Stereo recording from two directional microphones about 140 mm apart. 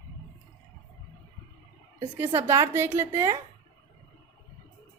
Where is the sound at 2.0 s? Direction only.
15° right (ahead or behind).